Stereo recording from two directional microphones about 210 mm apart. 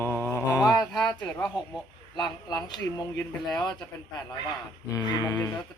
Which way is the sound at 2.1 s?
20° left (ahead or behind).